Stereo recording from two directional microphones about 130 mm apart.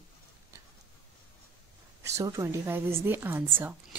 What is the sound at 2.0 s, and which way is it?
Speech, 25° right (ahead or behind).